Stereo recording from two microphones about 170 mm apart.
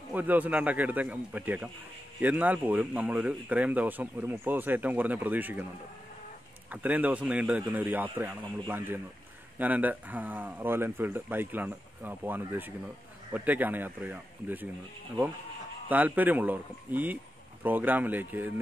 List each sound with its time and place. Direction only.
0.1 s a man's voice: 10° right (ahead or behind)
6.7 s a man's voice: 10° right (ahead or behind)
15.9 s a man's voice: 10° right (ahead or behind)